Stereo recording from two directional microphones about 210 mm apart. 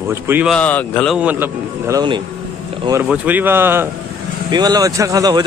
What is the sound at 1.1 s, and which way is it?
A man's voice, 10° right (ahead or behind).